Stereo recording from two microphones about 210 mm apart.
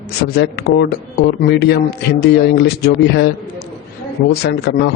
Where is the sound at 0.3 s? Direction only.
50° left (ahead or behind).